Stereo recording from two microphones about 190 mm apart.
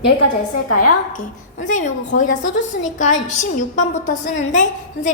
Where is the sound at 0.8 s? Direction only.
45° left (ahead or behind).